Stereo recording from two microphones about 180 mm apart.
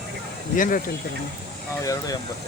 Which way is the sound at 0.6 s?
50° left (ahead or behind).